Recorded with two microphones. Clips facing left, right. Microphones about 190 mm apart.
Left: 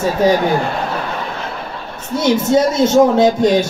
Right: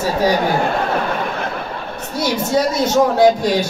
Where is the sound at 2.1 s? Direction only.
20° left (ahead or behind).